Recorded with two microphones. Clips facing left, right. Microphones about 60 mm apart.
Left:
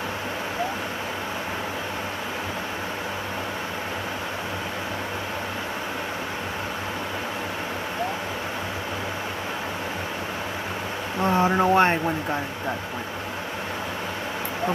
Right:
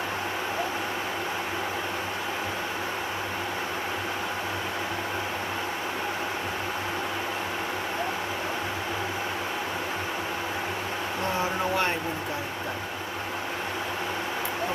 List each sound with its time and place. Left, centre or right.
11.4 s speech: left